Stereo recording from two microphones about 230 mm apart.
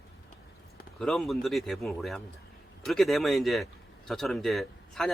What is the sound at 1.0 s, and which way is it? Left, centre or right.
Speech, centre.